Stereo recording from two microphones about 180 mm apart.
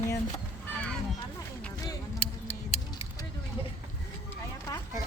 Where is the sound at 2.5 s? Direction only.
35° left (ahead or behind).